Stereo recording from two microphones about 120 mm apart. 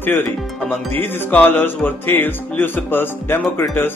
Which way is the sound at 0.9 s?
15° left (ahead or behind).